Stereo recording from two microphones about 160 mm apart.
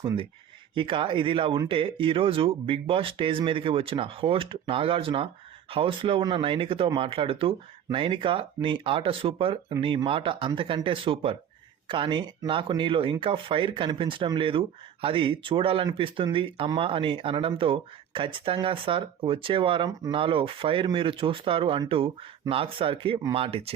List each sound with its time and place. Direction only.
0.0 s speech: 30° right (ahead or behind)